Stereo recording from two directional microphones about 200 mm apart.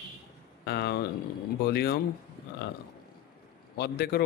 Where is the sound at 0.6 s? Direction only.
55° left (ahead or behind).